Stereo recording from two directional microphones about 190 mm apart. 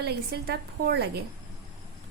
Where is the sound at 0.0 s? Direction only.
55° right (ahead or behind).